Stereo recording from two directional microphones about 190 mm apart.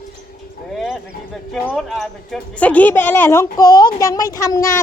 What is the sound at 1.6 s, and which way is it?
Speech, centre (ahead or behind).